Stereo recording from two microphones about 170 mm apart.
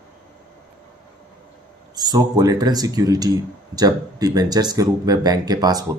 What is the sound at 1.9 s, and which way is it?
Speech, 25° right (ahead or behind).